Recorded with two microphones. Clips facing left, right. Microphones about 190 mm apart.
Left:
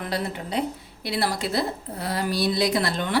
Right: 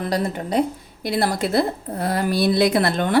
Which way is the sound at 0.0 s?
45° right (ahead or behind).